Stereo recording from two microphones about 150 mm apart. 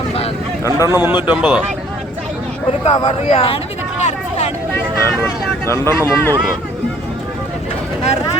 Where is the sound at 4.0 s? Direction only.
45° left (ahead or behind).